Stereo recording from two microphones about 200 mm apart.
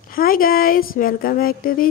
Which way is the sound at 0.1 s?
45° left (ahead or behind).